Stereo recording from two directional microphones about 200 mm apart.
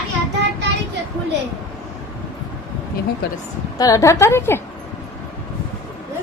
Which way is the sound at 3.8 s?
15° left (ahead or behind).